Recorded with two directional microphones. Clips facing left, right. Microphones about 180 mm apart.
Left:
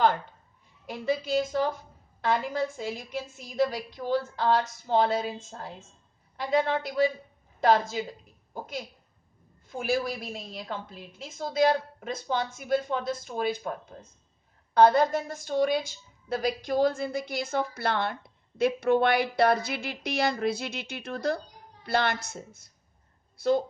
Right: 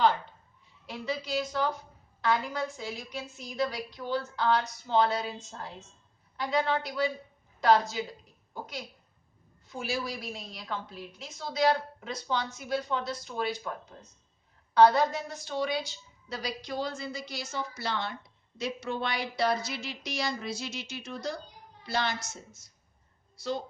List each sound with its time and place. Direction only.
0.9 s a woman's voice: 50° left (ahead or behind)
6.8 s a woman's voice: 50° left (ahead or behind)
9.6 s a woman's voice: 55° left (ahead or behind)